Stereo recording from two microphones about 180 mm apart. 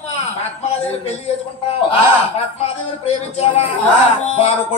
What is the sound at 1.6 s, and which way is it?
A man's voice, 30° left (ahead or behind).